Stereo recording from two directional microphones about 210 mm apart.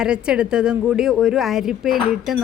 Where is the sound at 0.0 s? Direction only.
5° right (ahead or behind).